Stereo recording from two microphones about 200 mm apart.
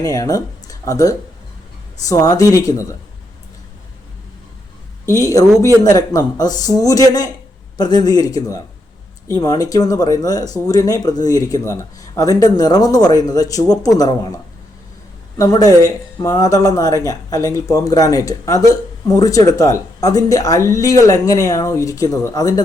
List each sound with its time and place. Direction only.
0.0 s speech: 20° left (ahead or behind)
5.2 s speech: 20° left (ahead or behind)
15.4 s speech: 20° left (ahead or behind)